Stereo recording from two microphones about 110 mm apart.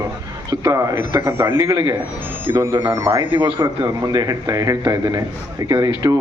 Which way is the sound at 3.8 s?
35° right (ahead or behind).